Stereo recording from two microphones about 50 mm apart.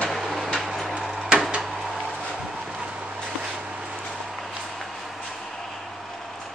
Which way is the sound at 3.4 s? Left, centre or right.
Centre.